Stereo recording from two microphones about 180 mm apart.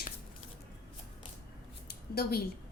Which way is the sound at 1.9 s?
60° left (ahead or behind).